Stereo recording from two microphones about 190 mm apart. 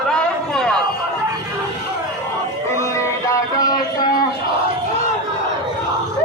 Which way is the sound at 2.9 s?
20° left (ahead or behind).